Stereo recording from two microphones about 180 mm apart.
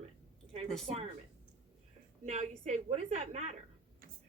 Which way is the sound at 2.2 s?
40° right (ahead or behind).